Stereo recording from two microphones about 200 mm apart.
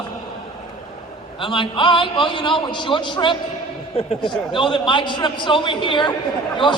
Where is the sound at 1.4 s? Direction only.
25° left (ahead or behind).